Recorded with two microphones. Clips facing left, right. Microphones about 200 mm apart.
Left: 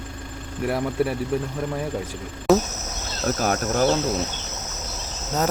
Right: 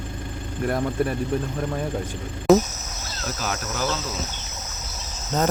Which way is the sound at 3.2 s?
50° left (ahead or behind).